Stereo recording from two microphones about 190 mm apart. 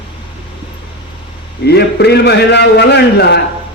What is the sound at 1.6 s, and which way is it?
A man's voice, 60° left (ahead or behind).